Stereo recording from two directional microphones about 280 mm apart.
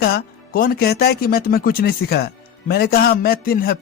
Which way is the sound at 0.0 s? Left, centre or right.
Left.